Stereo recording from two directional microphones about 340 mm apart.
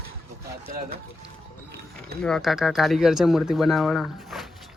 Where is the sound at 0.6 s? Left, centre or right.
Right.